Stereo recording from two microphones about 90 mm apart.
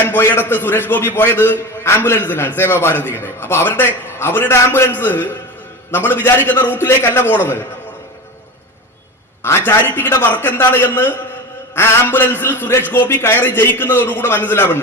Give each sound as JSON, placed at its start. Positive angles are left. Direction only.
{"t": 0.0, "sound": "a man's voice", "side_deg": 25}
{"t": 9.4, "sound": "a man's voice", "side_deg": 25}